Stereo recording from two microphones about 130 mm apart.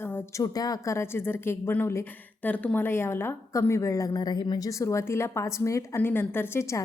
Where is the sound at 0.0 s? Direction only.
20° left (ahead or behind).